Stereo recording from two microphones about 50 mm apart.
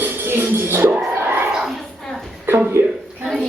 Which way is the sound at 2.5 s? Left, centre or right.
Right.